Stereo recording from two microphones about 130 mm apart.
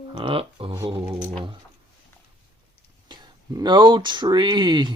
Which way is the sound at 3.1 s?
35° right (ahead or behind).